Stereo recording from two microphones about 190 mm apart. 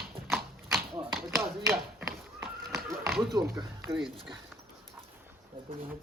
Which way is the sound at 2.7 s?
Centre (ahead or behind).